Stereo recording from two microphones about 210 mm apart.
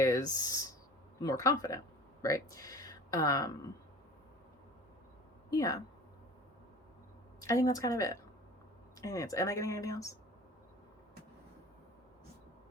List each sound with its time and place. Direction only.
0.0 s a sound: 15° left (ahead or behind)
1.2 s speech: 15° left (ahead or behind)
5.5 s speech: 15° left (ahead or behind)
7.4 s speech: 15° left (ahead or behind)